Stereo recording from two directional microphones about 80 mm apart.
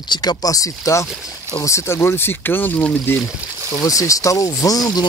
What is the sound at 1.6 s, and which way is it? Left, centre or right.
Speech, left.